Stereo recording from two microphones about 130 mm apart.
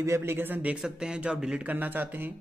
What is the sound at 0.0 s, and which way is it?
A man's voice, 20° right (ahead or behind).